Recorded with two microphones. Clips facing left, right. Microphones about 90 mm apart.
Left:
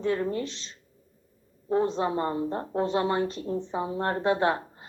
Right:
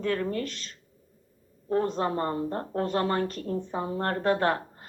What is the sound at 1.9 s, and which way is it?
A woman's voice, 15° left (ahead or behind).